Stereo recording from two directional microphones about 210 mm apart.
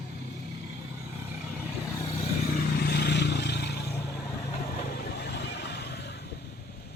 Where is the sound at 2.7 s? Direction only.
50° left (ahead or behind).